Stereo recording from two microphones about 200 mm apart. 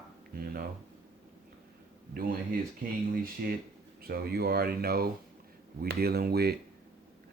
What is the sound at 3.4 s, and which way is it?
Speech, 45° right (ahead or behind).